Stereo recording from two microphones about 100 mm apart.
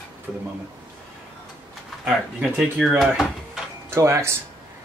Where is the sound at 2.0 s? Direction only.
10° right (ahead or behind).